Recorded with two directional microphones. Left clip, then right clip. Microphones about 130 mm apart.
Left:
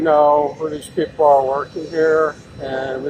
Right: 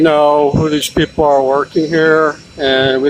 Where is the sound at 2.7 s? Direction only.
80° right.